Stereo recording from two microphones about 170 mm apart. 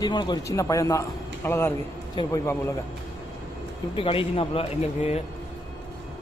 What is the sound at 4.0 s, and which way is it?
Speech, 35° left (ahead or behind).